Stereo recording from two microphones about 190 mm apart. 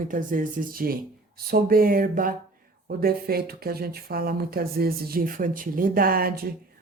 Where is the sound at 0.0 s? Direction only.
45° right (ahead or behind).